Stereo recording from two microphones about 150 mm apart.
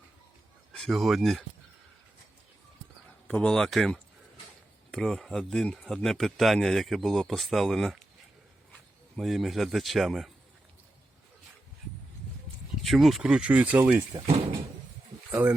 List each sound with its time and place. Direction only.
0.7 s speech: centre (ahead or behind)
3.2 s speech: 5° left (ahead or behind)
9.1 s speech: centre (ahead or behind)
12.8 s speech: centre (ahead or behind)
14.3 s door: 45° right (ahead or behind)
15.3 s speech: 15° right (ahead or behind)